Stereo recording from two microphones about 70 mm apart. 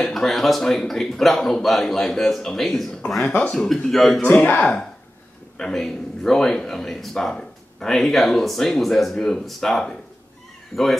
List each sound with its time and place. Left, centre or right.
0.0 s speech: centre
3.3 s speech: left
3.5 s speech: centre
4.2 s speech: left
4.6 s speech: centre